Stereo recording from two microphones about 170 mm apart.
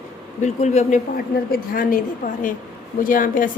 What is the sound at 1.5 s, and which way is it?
Speech, 55° left (ahead or behind).